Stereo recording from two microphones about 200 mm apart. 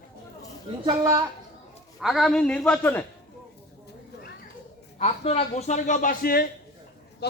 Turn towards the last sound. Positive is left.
turn(degrees=55)  # may be behind; listen again after turning